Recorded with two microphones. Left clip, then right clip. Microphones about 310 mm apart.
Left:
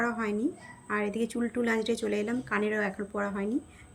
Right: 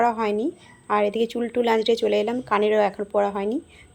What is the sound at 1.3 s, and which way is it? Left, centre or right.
Speech, right.